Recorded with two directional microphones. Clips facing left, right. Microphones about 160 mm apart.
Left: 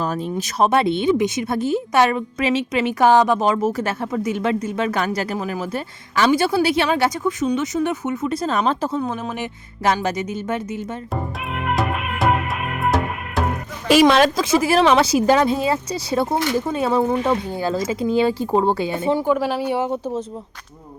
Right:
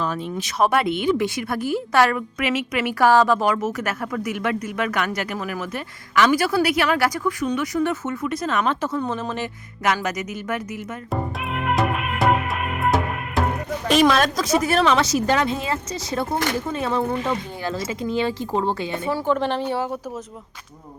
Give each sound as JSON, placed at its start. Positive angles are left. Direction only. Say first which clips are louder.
{"t": 0.0, "sound": "speech", "louder": "left 3 dB", "side_deg": 40}
{"t": 0.6, "sound": "a woman's voice", "louder": "left 2 dB", "side_deg": 25}
{"t": 9.0, "sound": "a woman's voice", "louder": "left 1 dB", "side_deg": 10}
{"t": 9.8, "sound": "a woman's voice", "louder": "left 3 dB", "side_deg": 30}
{"t": 11.1, "sound": "music", "louder": "right 4 dB", "side_deg": 0}
{"t": 14.1, "sound": "speech", "louder": "left 4 dB", "side_deg": 30}
{"t": 19.0, "sound": "a woman's voice", "louder": "left 6 dB", "side_deg": 20}
{"t": 19.3, "sound": "a woman's voice", "louder": "left 2 dB", "side_deg": 5}